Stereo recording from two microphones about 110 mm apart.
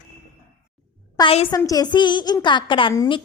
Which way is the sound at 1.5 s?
35° left (ahead or behind).